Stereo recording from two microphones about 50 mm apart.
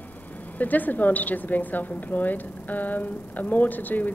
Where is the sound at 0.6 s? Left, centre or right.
Left.